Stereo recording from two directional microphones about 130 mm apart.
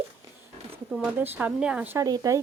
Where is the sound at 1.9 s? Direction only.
25° right (ahead or behind).